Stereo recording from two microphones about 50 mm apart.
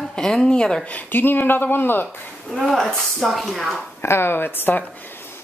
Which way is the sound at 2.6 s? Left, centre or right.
Centre.